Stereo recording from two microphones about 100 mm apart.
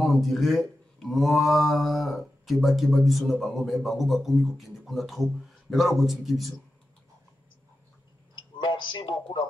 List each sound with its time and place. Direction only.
0.0 s speech: centre (ahead or behind)
8.4 s speech: 50° left (ahead or behind)